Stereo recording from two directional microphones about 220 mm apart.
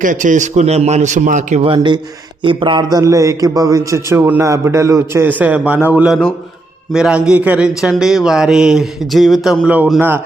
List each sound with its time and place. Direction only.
0.0 s a man's voice: 35° right (ahead or behind); by 10.2 s 10° right (ahead or behind)